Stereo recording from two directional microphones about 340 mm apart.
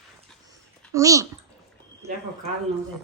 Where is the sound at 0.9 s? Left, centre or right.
Centre.